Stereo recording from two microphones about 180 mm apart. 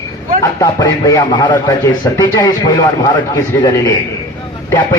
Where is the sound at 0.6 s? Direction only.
20° left (ahead or behind).